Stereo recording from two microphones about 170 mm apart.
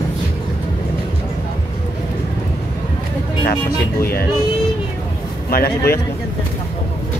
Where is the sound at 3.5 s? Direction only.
65° left (ahead or behind).